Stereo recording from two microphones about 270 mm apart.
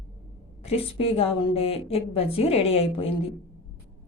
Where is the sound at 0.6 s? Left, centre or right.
Left.